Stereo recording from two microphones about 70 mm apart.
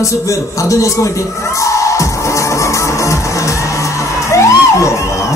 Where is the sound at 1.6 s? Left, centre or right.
Left.